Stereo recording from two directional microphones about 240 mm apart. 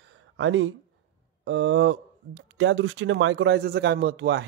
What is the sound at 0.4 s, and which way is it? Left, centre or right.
Speech, right.